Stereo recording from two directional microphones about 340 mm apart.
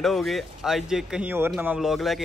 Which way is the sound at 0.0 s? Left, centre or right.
Centre.